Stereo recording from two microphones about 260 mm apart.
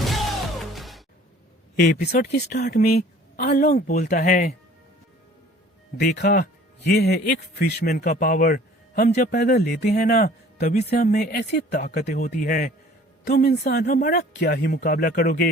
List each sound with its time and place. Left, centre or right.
0.0 s music: centre
1.8 s speech: left
6.0 s speech: left